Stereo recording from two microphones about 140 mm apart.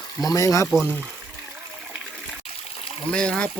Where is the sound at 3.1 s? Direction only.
5° left (ahead or behind).